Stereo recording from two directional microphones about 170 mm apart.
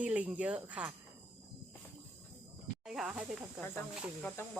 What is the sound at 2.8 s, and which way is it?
Speech, centre (ahead or behind).